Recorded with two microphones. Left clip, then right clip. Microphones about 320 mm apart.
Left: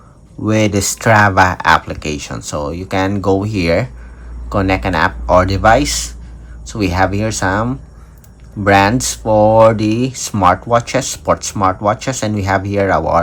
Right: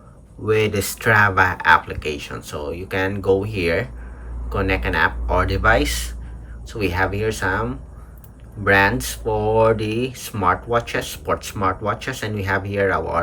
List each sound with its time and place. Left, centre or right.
0.4 s speech: centre